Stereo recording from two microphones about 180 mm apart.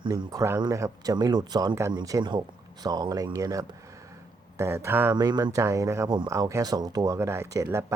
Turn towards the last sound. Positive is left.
turn(degrees=-15)  # may be behind; listen again after turning